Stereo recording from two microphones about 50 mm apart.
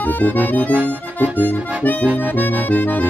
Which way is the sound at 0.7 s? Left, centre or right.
Right.